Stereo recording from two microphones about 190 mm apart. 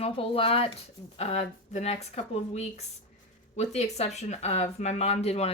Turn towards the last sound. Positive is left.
turn(degrees=35)  # may be behind; listen again after turning